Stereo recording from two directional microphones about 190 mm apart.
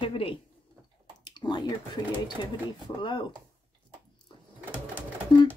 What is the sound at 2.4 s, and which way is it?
Speech, 25° left (ahead or behind).